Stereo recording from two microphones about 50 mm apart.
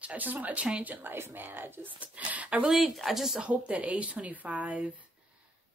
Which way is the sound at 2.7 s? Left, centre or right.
Centre.